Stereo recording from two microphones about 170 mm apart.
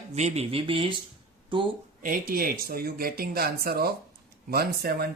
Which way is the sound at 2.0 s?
55° right (ahead or behind).